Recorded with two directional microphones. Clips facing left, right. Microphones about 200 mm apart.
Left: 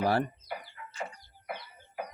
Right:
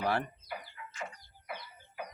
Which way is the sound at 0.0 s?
35° left (ahead or behind).